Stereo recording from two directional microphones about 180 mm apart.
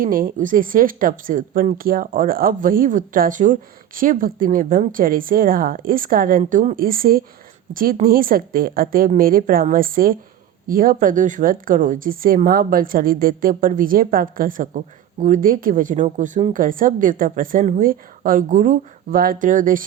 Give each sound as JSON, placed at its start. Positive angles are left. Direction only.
{"t": 0.0, "sound": "speech", "side_deg": -50}
{"t": 6.4, "sound": "speech", "side_deg": -40}